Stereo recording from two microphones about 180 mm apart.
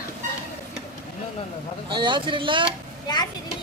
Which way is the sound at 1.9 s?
25° right (ahead or behind).